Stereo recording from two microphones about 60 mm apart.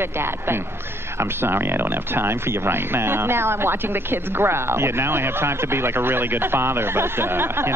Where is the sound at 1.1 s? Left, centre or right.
Right.